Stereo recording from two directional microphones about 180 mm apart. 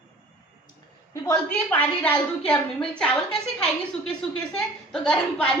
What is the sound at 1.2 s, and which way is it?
A woman's voice, 10° left (ahead or behind).